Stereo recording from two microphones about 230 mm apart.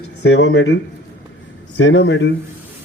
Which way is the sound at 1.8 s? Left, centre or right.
Left.